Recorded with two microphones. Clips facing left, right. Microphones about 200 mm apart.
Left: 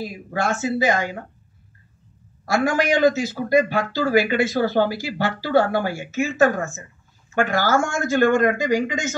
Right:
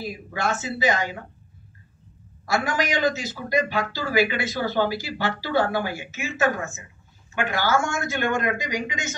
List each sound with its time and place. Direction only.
0.0 s a man's voice: 50° left (ahead or behind)
2.4 s a man's voice: 50° left (ahead or behind)
7.3 s a man's voice: 45° left (ahead or behind)